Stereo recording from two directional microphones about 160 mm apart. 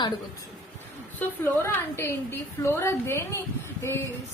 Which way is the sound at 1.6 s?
15° left (ahead or behind).